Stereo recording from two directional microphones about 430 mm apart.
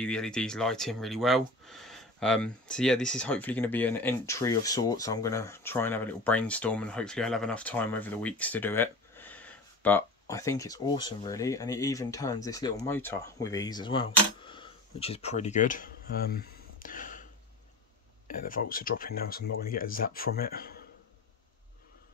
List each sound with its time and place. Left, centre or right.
0.0 s speech: centre; by 20.8 s left